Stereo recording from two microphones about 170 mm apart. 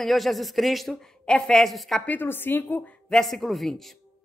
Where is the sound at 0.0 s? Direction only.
Centre (ahead or behind).